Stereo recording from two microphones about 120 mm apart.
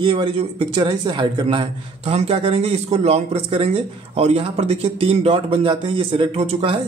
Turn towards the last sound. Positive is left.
turn(degrees=-55)  # may be behind; listen again after turning